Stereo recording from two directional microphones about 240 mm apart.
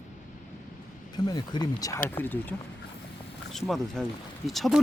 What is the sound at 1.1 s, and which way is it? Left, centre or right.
Speech, centre.